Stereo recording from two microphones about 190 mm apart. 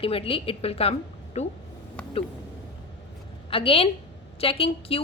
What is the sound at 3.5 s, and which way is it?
A woman's voice, 30° left (ahead or behind).